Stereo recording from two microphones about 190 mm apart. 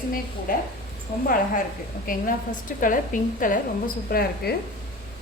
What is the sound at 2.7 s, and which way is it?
A woman's voice, 45° left (ahead or behind).